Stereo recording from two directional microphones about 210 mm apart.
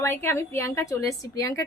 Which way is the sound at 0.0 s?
10° left (ahead or behind).